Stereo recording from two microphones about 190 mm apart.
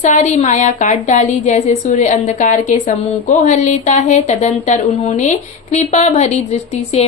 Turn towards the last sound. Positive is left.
turn(degrees=35)  # may be behind; listen again after turning